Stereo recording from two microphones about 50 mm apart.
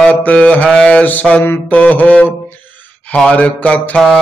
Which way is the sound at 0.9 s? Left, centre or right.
Left.